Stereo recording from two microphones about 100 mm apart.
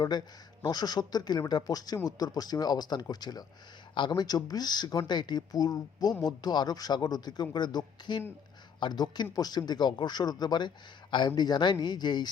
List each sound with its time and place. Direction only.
0.0 s a man's voice: 45° left (ahead or behind)